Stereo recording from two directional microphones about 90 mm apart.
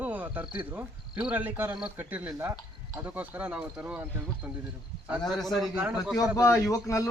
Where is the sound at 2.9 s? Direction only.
20° right (ahead or behind).